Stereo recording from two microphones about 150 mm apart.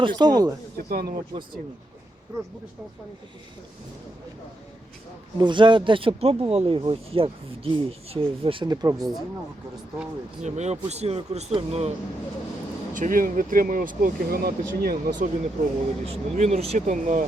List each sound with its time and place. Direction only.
0.0 s speech: 30° right (ahead or behind)
0.8 s speech: 85° right
2.3 s speech: 20° right (ahead or behind)
5.4 s speech: 30° right (ahead or behind)
8.7 s speech: 25° right (ahead or behind)
10.4 s speech: 50° right (ahead or behind)
12.9 s speech: 65° right (ahead or behind); by 15.3 s 80° right
16.0 s speech: 50° right (ahead or behind)